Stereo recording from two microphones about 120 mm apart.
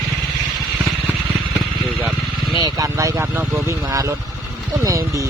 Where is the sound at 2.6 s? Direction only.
30° right (ahead or behind).